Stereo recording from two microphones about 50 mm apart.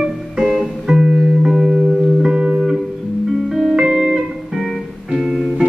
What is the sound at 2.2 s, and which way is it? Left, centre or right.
Music, centre.